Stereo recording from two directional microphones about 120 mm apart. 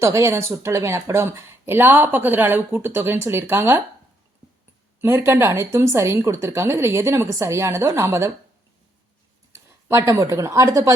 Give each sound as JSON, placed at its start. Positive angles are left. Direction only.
{"t": 0.0, "sound": "speech", "side_deg": -25}
{"t": 4.9, "sound": "speech", "side_deg": -20}
{"t": 9.5, "sound": "speech", "side_deg": -25}